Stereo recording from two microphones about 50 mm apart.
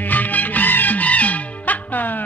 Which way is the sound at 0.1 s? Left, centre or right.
Left.